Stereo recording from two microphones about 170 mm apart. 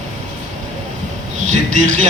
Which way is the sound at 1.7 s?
45° right (ahead or behind).